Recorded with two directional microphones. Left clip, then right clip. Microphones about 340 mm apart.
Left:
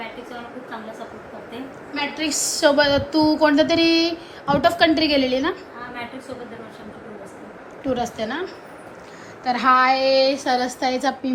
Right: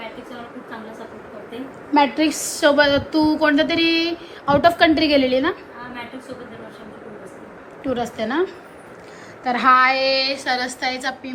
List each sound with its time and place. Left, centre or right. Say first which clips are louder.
2.2 s a woman's voice: right 1 dB; centre
7.9 s a woman's voice: right 1 dB; left
9.4 s a woman's voice: right 2 dB; centre
11.1 s a woman's voice: left 5 dB; centre